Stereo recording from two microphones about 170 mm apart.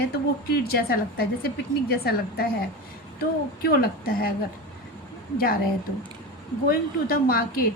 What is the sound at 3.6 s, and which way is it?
Speech, 65° left (ahead or behind).